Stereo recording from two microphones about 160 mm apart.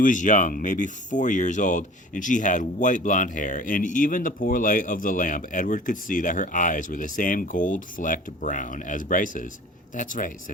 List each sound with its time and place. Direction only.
0.0 s speech: 55° left (ahead or behind)